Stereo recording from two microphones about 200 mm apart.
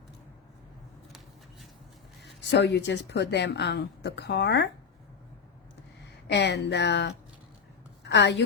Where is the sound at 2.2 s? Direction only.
60° left (ahead or behind).